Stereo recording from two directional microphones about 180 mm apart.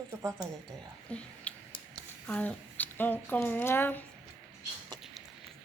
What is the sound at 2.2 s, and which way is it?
Speech, 5° left (ahead or behind).